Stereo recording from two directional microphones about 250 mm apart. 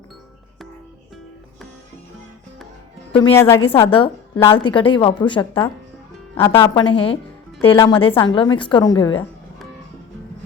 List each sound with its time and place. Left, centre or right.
3.1 s speech: left
3.3 s a woman's voice: centre
3.6 s a woman's voice: left